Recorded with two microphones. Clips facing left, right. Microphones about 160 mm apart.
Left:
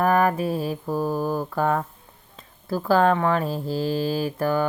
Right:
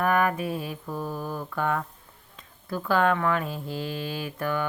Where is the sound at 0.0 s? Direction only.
35° left (ahead or behind).